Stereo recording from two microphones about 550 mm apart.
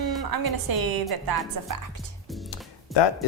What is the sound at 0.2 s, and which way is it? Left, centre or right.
A woman's voice, right.